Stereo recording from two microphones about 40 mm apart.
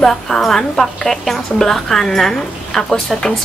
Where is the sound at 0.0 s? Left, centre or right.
Centre.